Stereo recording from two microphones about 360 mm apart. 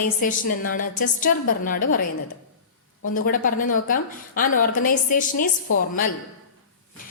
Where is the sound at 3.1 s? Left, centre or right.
Left.